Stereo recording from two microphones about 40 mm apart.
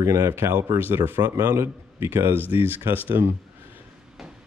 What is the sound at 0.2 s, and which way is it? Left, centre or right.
A man's voice, right.